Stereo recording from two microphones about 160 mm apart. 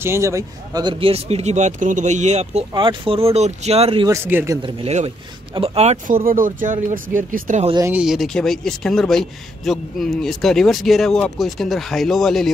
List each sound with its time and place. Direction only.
0.0 s speech: 15° right (ahead or behind); by 2.6 s 45° right (ahead or behind)
2.7 s speech: 30° right (ahead or behind)
4.3 s speech: 10° right (ahead or behind)
4.6 s speech: 30° right (ahead or behind)
6.0 s speech: 60° right (ahead or behind)
7.8 s speech: 5° right (ahead or behind)